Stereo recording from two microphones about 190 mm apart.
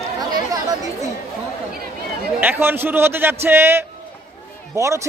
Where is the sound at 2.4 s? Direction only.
10° right (ahead or behind).